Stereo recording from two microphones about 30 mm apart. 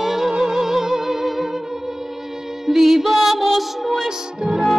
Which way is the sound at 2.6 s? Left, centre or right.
Centre.